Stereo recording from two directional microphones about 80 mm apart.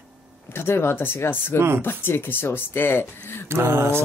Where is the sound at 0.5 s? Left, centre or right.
Left.